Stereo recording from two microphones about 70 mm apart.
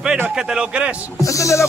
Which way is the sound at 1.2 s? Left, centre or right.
Left.